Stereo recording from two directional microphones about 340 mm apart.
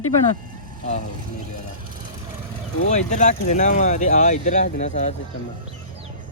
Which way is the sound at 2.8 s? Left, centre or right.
Left.